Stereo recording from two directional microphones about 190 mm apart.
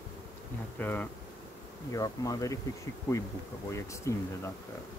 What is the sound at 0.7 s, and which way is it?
Insect, 10° left (ahead or behind).